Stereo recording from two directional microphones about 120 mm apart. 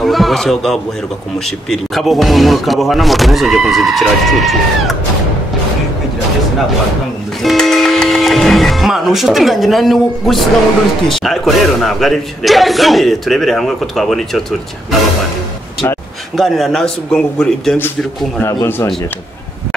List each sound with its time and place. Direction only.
0.0 s a man's voice: centre (ahead or behind)
7.4 s speech: centre (ahead or behind)
16.3 s speech: centre (ahead or behind)
18.4 s speech: 25° left (ahead or behind)